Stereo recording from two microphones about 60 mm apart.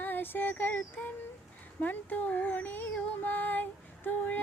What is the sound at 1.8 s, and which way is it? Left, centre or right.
Speech, left.